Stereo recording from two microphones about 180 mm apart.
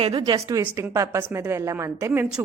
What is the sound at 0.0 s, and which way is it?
A woman's voice, 25° right (ahead or behind).